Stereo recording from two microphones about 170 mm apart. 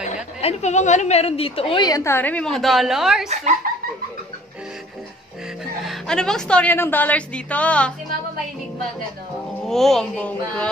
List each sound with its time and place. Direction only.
0.0 s a woman's voice: 40° left (ahead or behind); by 3.3 s centre (ahead or behind)
3.6 s a sound: 55° right (ahead or behind)
5.9 s a woman's voice: 5° left (ahead or behind)
9.7 s speech: centre (ahead or behind)